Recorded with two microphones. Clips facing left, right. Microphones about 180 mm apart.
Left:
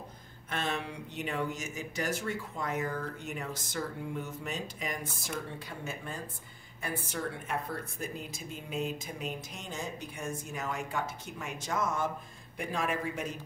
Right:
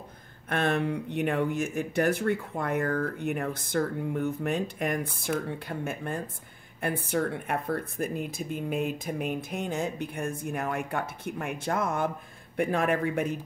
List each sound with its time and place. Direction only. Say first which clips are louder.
0.5 s speech: right 8 dB; 55° right (ahead or behind)